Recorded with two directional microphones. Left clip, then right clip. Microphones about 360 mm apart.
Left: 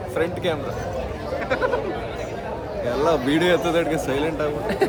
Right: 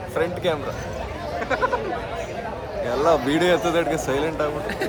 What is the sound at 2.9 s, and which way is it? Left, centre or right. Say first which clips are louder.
A man's voice: right 1 dB; centre.